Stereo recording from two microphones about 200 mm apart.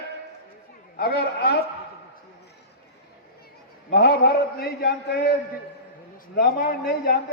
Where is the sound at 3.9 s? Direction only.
50° left (ahead or behind).